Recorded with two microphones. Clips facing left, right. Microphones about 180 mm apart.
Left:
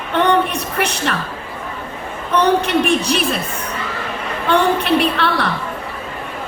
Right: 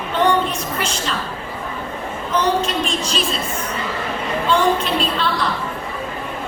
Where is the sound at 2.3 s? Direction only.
65° left (ahead or behind).